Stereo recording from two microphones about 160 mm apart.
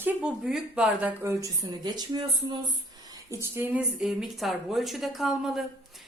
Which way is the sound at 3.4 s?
15° right (ahead or behind).